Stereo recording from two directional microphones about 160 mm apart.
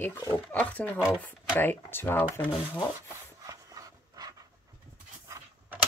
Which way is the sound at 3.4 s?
20° right (ahead or behind).